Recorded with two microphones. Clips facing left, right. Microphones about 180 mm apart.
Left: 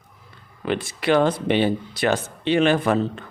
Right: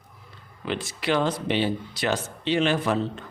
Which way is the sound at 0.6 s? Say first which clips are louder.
Left 5 dB; 55° left (ahead or behind).